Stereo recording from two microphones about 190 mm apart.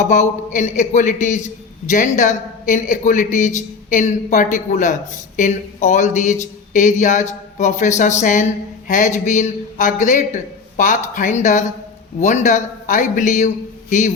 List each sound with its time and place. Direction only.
0.0 s a man's voice: 40° left (ahead or behind)